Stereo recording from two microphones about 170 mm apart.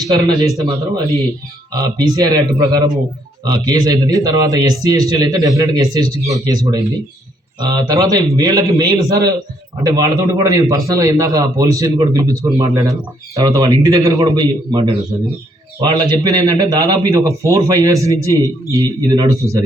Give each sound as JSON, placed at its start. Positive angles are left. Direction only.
{"t": 0.3, "sound": "a man's voice", "side_deg": -20}
{"t": 1.7, "sound": "a man's voice", "side_deg": -25}